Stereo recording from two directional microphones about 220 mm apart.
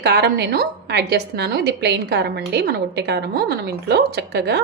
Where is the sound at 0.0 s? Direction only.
50° right (ahead or behind).